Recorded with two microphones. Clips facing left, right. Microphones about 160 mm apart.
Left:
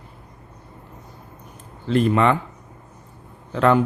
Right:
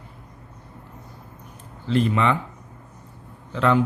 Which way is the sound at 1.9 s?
50° left (ahead or behind).